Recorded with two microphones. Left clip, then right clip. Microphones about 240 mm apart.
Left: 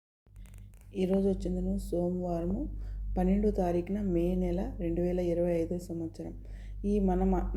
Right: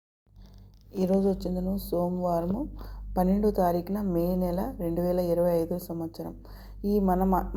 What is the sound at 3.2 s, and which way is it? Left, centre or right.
Speech, right.